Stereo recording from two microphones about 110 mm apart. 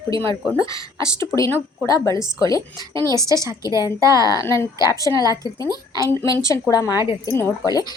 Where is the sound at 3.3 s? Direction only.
30° right (ahead or behind).